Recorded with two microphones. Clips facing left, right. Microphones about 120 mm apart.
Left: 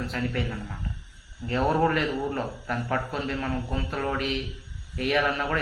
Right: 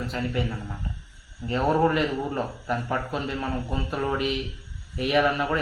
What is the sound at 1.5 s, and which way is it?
A man's voice, 5° right (ahead or behind).